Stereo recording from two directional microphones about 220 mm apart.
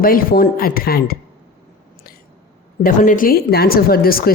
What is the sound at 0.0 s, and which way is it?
A woman's voice, 40° left (ahead or behind).